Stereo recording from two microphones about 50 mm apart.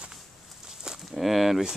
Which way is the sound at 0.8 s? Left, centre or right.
Centre.